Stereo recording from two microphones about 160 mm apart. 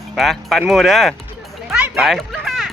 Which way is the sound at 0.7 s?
Centre (ahead or behind).